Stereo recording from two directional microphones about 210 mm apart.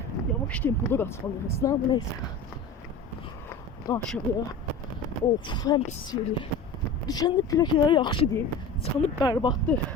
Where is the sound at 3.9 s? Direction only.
15° left (ahead or behind).